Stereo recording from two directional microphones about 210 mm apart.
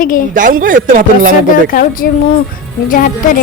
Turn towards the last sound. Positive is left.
turn(degrees=40)  # may be behind; listen again after turning